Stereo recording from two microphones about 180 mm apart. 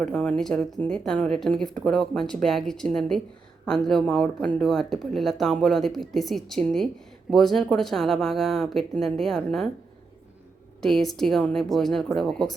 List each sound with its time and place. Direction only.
0.0 s speech: 5° left (ahead or behind)
10.8 s speech: centre (ahead or behind)